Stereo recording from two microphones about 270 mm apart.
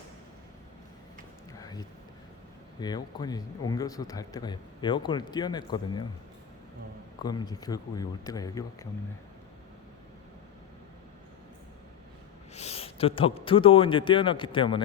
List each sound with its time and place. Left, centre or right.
1.5 s a sound: centre
2.8 s speech: centre
7.2 s speech: centre
12.5 s a man's voice: left